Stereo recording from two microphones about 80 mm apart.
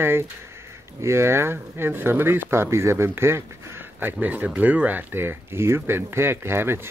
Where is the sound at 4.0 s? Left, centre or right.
Right.